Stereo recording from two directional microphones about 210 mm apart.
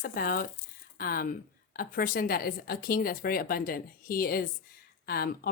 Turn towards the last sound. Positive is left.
turn(degrees=45)  # may be behind; listen again after turning